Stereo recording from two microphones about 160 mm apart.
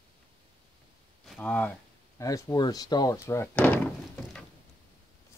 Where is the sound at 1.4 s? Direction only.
10° left (ahead or behind).